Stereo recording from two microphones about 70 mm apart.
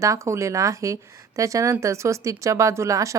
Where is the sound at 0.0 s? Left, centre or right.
Right.